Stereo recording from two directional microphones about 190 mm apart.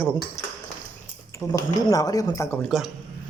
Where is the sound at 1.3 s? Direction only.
15° left (ahead or behind).